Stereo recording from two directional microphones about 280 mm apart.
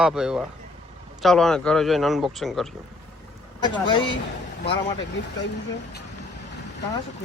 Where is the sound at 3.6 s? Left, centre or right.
Centre.